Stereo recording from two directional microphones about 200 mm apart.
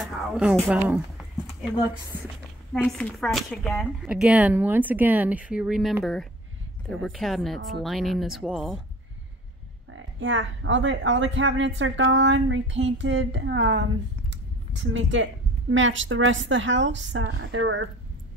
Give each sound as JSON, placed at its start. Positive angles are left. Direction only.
{"t": 0.0, "sound": "speech", "side_deg": -5}
{"t": 2.7, "sound": "speech", "side_deg": 5}
{"t": 9.8, "sound": "speech", "side_deg": -75}
{"t": 14.3, "sound": "a sound", "side_deg": -70}
{"t": 15.7, "sound": "speech", "side_deg": -75}